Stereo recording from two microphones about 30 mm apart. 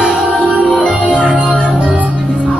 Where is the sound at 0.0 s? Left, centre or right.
Right.